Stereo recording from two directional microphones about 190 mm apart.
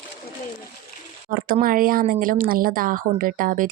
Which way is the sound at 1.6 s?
50° right (ahead or behind).